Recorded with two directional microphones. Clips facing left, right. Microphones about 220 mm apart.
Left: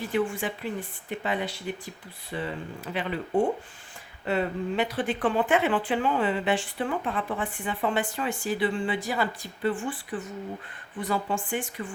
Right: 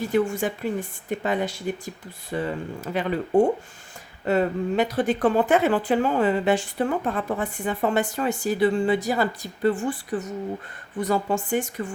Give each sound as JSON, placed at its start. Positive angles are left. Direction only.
{"t": 0.1, "sound": "speech", "side_deg": -45}